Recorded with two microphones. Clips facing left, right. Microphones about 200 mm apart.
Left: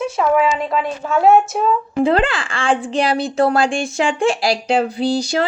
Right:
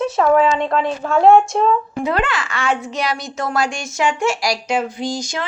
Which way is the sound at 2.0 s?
30° left (ahead or behind).